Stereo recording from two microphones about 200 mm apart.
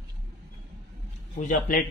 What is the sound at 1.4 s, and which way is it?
Speech, 45° left (ahead or behind).